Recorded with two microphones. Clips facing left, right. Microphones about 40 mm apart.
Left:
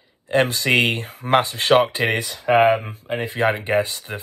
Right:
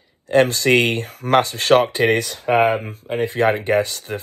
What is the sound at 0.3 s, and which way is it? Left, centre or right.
Speech, centre.